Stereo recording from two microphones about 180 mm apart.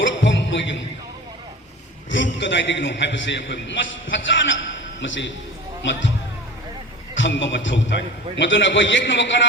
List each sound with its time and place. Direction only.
0.0 s music: 90° left
2.0 s a man's voice: 90° left
7.2 s a man's voice: 90° left